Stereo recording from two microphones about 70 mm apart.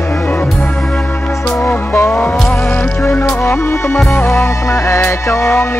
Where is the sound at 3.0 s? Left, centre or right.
Left.